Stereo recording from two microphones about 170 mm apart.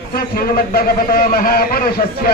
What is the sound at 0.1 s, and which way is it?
A man's voice, 60° left (ahead or behind).